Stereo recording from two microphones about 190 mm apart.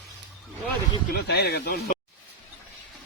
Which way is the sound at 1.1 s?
60° left (ahead or behind).